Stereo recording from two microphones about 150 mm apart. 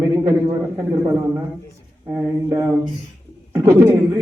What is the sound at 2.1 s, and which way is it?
A man's voice, 20° right (ahead or behind).